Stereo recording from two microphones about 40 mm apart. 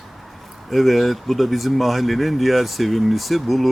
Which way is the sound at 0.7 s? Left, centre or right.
Centre.